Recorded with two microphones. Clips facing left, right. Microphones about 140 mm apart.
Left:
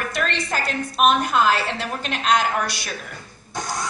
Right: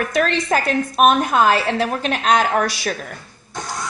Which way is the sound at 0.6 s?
50° right (ahead or behind).